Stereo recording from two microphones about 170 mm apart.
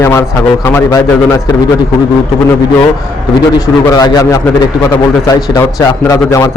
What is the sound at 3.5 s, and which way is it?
A man's voice, 20° left (ahead or behind).